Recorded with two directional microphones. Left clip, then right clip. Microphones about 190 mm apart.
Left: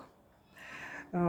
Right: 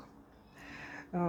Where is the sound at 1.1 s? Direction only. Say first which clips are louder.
Left 2 dB; 5° left (ahead or behind).